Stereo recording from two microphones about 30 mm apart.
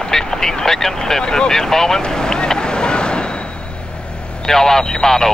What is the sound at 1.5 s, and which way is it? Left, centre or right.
Speech, centre.